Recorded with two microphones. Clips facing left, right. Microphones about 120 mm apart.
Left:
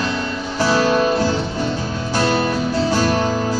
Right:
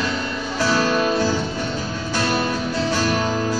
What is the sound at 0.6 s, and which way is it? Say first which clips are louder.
Music: left 3 dB; 30° left (ahead or behind).